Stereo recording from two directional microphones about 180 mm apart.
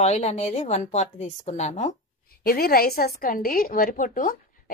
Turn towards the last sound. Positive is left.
turn(degrees=50)  # may be behind; listen again after turning